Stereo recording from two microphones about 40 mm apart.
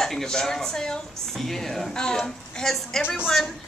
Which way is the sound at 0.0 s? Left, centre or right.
Centre.